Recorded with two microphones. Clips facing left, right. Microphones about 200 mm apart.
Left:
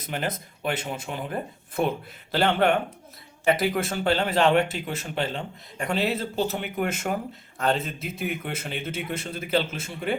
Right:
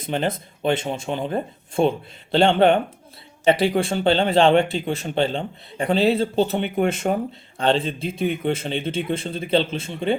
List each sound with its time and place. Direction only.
0.0 s a man's voice: 25° right (ahead or behind)